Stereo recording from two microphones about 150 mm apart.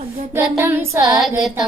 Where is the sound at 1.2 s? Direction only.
Centre (ahead or behind).